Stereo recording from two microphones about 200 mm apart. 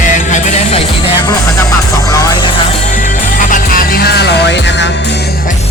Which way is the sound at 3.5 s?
45° left (ahead or behind).